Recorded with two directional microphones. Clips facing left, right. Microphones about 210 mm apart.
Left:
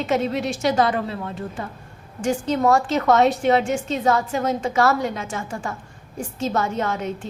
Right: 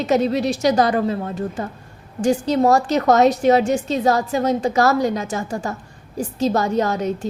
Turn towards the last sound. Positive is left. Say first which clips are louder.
# right 5 dB
turn(degrees=-40)  # may be behind; listen again after turning